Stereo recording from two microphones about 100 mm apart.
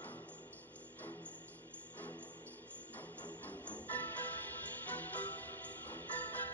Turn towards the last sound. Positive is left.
turn(degrees=15)  # may be behind; listen again after turning